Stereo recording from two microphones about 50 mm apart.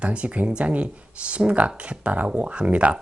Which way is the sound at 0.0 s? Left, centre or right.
Right.